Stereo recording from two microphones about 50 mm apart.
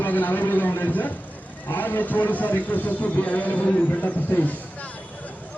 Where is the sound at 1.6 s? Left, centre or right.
Left.